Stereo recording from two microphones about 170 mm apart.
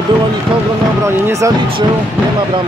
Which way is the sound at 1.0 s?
15° right (ahead or behind).